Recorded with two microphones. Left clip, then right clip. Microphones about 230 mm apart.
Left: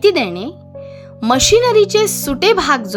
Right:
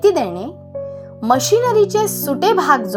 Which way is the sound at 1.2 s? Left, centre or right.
Left.